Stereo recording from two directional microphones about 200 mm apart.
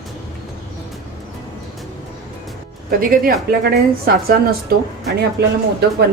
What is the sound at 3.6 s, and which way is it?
Speech, 50° right (ahead or behind).